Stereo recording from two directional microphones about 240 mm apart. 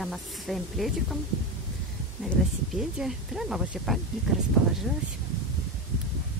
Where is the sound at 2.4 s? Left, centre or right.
Centre.